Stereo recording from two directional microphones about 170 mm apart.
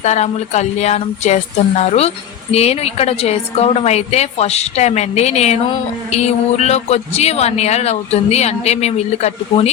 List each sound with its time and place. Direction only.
0.0 s a man's voice: 40° left (ahead or behind)